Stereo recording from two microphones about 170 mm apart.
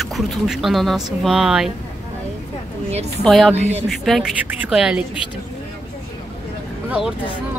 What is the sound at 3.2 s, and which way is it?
Speech, centre (ahead or behind).